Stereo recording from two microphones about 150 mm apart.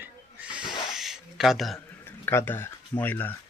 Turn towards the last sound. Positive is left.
turn(degrees=10)  # may be behind; listen again after turning